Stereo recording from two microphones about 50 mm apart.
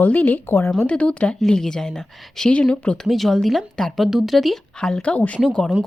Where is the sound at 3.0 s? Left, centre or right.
Centre.